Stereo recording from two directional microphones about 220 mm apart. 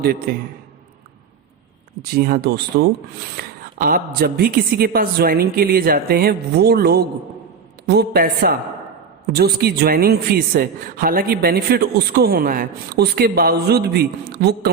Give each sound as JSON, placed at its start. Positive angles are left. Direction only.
{"t": 0.0, "sound": "a man's voice", "side_deg": -45}
{"t": 2.1, "sound": "a man's voice", "side_deg": -45}